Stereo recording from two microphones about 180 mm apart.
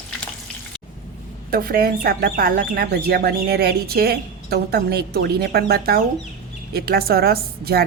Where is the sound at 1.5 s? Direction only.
55° right (ahead or behind).